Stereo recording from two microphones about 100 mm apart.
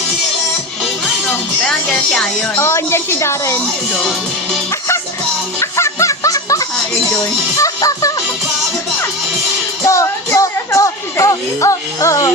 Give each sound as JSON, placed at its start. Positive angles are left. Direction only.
{"t": 1.6, "sound": "speech", "side_deg": 10}
{"t": 2.6, "sound": "a woman's voice", "side_deg": 25}
{"t": 5.5, "sound": "music", "side_deg": 30}
{"t": 9.8, "sound": "music", "side_deg": 35}